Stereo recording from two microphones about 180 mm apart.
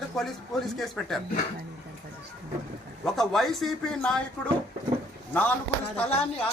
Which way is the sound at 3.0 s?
Centre (ahead or behind).